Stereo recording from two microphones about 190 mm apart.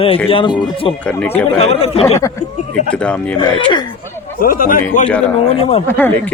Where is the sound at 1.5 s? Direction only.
30° left (ahead or behind).